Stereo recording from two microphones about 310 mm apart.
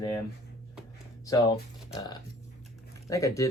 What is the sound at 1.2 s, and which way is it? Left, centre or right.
Speech, centre.